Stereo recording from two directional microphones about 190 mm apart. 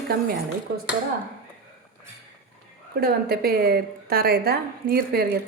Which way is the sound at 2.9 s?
55° right (ahead or behind).